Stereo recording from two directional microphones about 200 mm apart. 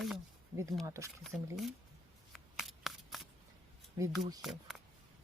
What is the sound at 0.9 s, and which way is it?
Speech, 15° right (ahead or behind).